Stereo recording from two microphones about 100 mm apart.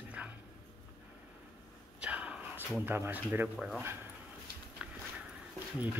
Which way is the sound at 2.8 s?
20° right (ahead or behind).